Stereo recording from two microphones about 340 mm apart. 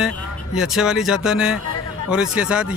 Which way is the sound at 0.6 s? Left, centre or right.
Centre.